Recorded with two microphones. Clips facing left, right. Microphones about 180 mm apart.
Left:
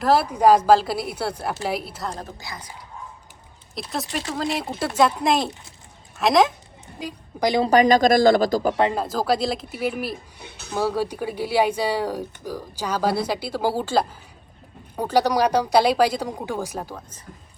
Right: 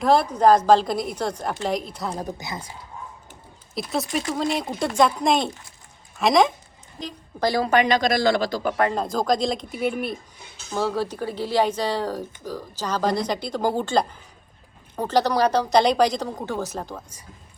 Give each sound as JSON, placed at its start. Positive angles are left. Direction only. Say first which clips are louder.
{"t": 0.0, "sound": "speech", "louder": "even", "side_deg": 5}
{"t": 2.0, "sound": "a woman's voice", "louder": "right 3 dB", "side_deg": -15}
{"t": 3.8, "sound": "speech", "louder": "right 3 dB", "side_deg": 0}
{"t": 7.0, "sound": "a woman's voice", "louder": "left 1 dB", "side_deg": 15}
{"t": 7.6, "sound": "speech", "louder": "left 5 dB", "side_deg": 40}
{"t": 9.0, "sound": "speech", "louder": "even", "side_deg": 5}